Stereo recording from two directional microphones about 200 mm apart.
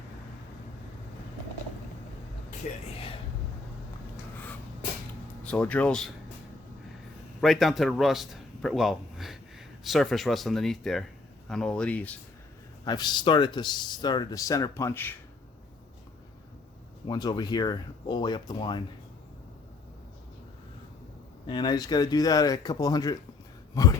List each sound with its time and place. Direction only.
5.4 s speech: 5° left (ahead or behind)
7.4 s a man's voice: centre (ahead or behind)
12.8 s speech: 20° left (ahead or behind)
17.1 s speech: 20° left (ahead or behind)
21.4 s speech: 20° left (ahead or behind)
23.8 s a sound: 20° left (ahead or behind)